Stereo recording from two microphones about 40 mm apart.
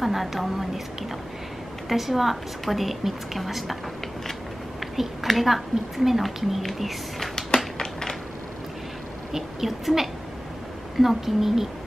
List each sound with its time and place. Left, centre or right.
0.0 s a woman's voice: centre
1.9 s a woman's voice: centre
4.9 s a woman's voice: centre
7.3 s tap: centre
9.3 s speech: centre